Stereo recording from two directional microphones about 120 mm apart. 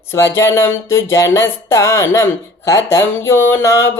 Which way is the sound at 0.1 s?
20° left (ahead or behind).